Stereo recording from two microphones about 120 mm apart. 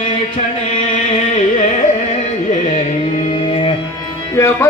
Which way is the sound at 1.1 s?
65° left (ahead or behind).